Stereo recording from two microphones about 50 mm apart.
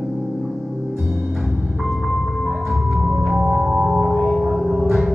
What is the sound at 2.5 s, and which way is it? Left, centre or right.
Music, centre.